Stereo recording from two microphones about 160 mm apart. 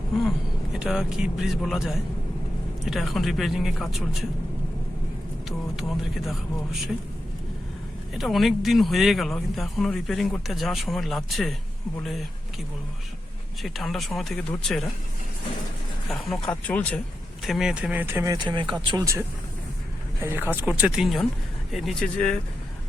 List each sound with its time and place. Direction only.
0.7 s speech: 5° right (ahead or behind)
5.5 s speech: centre (ahead or behind)
8.1 s speech: centre (ahead or behind)
13.6 s speech: centre (ahead or behind)
16.0 s speech: 5° left (ahead or behind)
17.4 s speech: centre (ahead or behind)
18.4 s speech: 30° right (ahead or behind); by 22.4 s 5° left (ahead or behind)